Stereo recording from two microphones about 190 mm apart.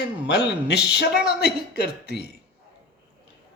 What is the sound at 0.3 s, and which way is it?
Speech, 60° left (ahead or behind).